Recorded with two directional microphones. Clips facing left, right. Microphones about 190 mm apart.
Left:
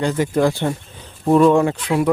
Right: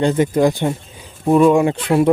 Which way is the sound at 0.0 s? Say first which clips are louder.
Right 3 dB; 20° right (ahead or behind).